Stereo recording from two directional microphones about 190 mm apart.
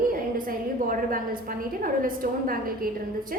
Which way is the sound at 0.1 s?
45° right (ahead or behind).